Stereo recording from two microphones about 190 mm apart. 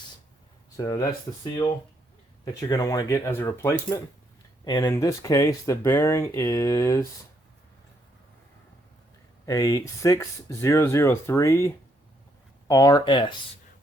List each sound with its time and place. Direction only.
0.8 s speech: 20° left (ahead or behind)
2.4 s speech: 20° left (ahead or behind)
9.5 s speech: 20° left (ahead or behind)